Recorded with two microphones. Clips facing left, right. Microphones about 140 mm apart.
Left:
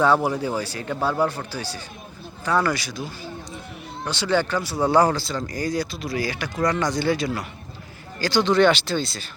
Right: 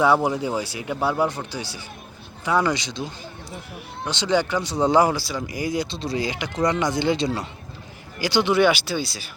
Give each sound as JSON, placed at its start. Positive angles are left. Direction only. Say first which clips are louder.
{"t": 0.0, "sound": "speech", "louder": "even", "side_deg": -15}
{"t": 5.9, "sound": "speech", "louder": "right 1 dB", "side_deg": -25}